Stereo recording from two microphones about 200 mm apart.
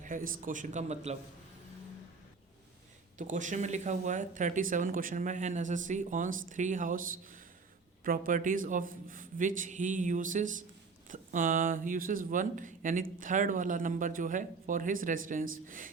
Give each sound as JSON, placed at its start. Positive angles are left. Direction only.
{"t": 0.0, "sound": "speech", "side_deg": -40}
{"t": 3.2, "sound": "speech", "side_deg": -40}